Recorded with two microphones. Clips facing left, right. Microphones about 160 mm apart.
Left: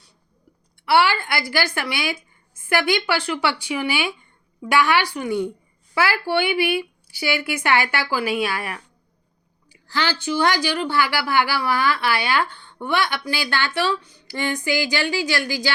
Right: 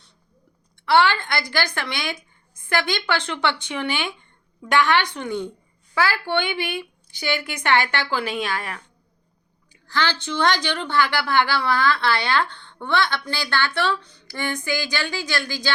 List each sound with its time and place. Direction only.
0.9 s a woman's voice: 10° left (ahead or behind)
9.9 s a woman's voice: 10° left (ahead or behind)